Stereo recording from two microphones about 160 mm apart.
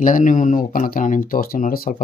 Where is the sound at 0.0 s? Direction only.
55° left (ahead or behind).